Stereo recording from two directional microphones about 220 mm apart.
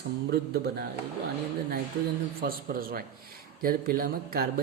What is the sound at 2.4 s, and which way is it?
Speech, 40° right (ahead or behind).